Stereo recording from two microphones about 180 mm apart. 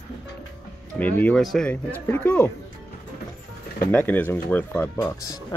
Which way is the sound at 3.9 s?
10° left (ahead or behind).